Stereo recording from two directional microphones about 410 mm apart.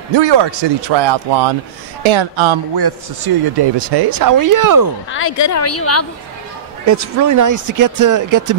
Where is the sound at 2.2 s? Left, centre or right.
Right.